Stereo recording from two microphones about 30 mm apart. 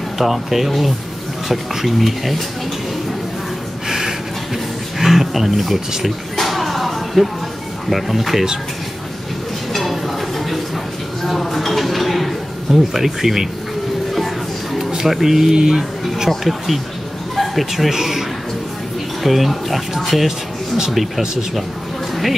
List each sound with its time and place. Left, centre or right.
0.2 s speech: centre
4.9 s speech: centre
6.3 s a sound: centre
7.9 s speech: centre
9.7 s a sound: centre
12.7 s speech: centre
14.1 s music: centre
15.0 s speech: centre
16.4 s speech: centre
19.2 s speech: centre